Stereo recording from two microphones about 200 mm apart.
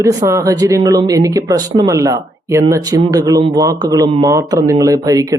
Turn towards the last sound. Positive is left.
turn(degrees=-15)  # may be behind; listen again after turning